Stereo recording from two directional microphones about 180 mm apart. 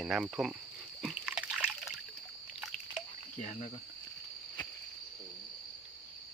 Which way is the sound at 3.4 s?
40° left (ahead or behind).